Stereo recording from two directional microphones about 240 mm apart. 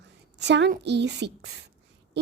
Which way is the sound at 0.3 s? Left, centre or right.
Right.